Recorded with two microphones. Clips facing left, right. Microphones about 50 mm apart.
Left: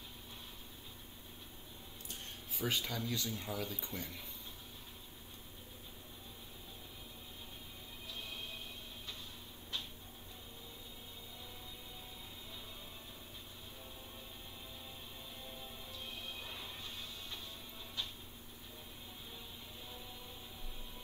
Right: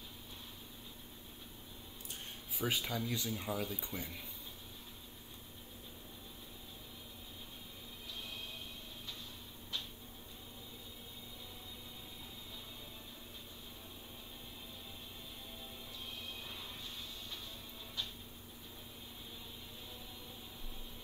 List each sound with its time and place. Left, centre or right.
2.5 s speech: centre